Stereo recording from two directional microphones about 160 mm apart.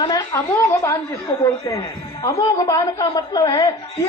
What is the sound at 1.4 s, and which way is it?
A woman's voice, 20° left (ahead or behind).